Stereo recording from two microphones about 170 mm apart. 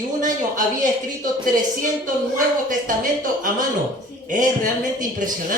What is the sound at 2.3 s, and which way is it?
A woman's voice, 50° right (ahead or behind).